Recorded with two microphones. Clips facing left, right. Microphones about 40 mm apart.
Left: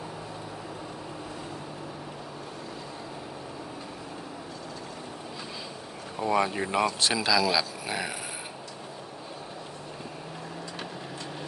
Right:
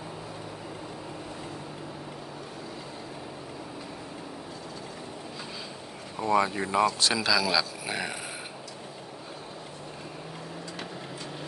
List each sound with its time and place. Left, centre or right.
6.1 s speech: centre
6.4 s speech: centre
7.1 s speech: centre